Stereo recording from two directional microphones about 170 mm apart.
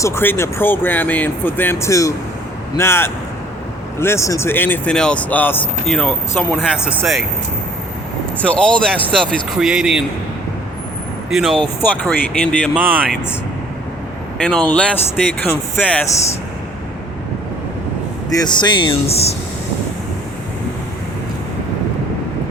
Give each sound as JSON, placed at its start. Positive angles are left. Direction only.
{"t": 0.0, "sound": "speech", "side_deg": 15}
{"t": 6.6, "sound": "speech", "side_deg": -5}
{"t": 8.4, "sound": "speech", "side_deg": 5}
{"t": 11.3, "sound": "speech", "side_deg": 0}
{"t": 12.7, "sound": "speech", "side_deg": -10}
{"t": 14.4, "sound": "speech", "side_deg": 5}
{"t": 18.3, "sound": "speech", "side_deg": 25}